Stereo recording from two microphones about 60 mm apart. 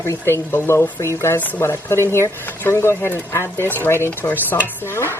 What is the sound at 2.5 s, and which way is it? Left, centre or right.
Stir, left.